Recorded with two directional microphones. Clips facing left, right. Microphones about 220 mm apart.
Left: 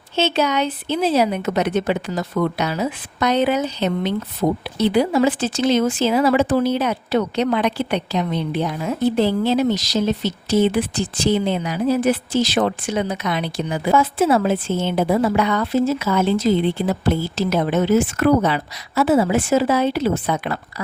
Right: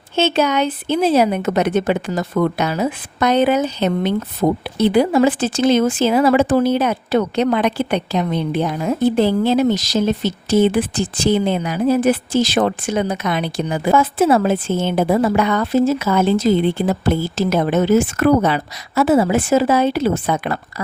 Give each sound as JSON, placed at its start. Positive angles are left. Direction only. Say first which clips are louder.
{"t": 0.2, "sound": "speech", "louder": "right 3 dB", "side_deg": -50}